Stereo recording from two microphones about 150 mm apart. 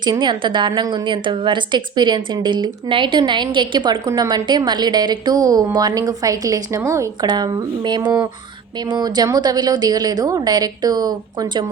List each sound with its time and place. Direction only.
0.0 s a woman's voice: 30° right (ahead or behind)